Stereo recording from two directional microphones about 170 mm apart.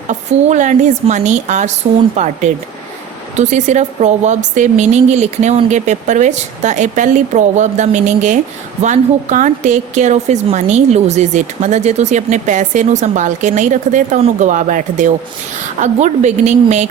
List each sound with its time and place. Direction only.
0.1 s a woman's voice: 45° right (ahead or behind)